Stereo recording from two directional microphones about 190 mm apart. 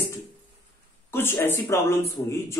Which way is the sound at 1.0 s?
10° left (ahead or behind).